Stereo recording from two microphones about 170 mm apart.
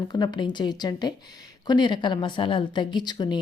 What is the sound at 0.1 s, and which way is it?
Speech, 25° left (ahead or behind).